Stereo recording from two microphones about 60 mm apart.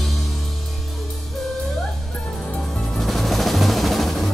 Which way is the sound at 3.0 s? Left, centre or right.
Centre.